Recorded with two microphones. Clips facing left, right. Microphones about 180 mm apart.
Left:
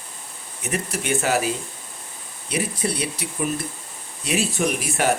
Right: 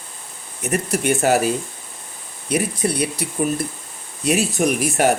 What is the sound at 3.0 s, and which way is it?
Speech, 45° right (ahead or behind).